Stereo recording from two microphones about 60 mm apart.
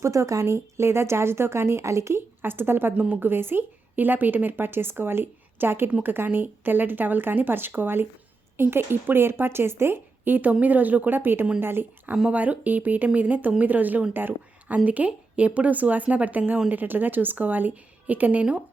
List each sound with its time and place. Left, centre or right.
0.0 s speech: right
2.4 s a woman's voice: right
12.3 s a woman's voice: right
14.8 s a woman's voice: right